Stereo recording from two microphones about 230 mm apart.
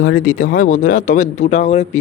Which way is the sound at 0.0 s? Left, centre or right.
Left.